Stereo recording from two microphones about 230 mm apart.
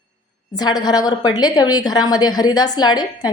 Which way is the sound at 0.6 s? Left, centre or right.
Centre.